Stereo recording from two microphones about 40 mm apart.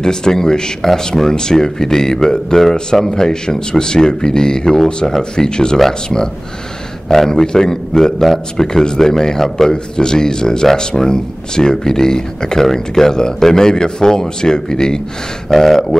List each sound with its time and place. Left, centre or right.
0.0 s speech: centre